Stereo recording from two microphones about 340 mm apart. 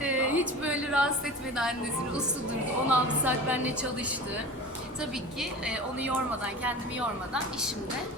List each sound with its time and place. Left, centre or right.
0.0 s a sound: centre
2.9 s a woman's voice: centre
5.4 s a woman's voice: centre